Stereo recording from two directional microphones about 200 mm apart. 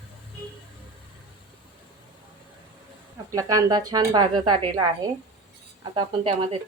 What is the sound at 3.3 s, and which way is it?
Speech, 15° right (ahead or behind).